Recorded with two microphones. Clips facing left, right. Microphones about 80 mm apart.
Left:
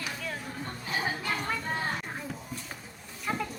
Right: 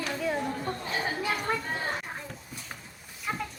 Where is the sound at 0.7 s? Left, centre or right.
Centre.